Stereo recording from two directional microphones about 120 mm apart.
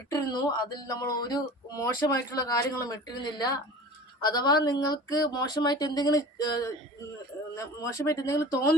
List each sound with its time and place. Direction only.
0.1 s speech: 35° left (ahead or behind)